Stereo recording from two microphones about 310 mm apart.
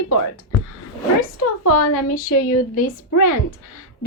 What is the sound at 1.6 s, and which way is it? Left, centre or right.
Speech, left.